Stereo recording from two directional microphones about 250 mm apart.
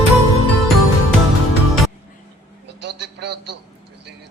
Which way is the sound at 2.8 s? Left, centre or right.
Right.